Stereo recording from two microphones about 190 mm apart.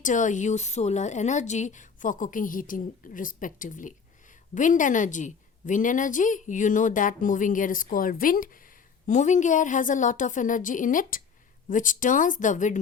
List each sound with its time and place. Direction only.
0.0 s a woman's voice: 40° left (ahead or behind)